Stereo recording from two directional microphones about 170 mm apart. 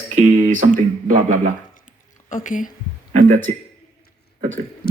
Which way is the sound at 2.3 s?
50° left (ahead or behind).